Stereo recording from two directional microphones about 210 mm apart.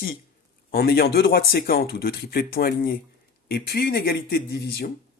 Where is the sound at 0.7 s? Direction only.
45° left (ahead or behind).